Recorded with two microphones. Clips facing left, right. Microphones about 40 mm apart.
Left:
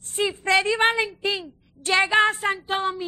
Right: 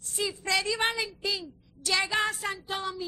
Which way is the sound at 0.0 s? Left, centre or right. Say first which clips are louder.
Left 7 dB; left.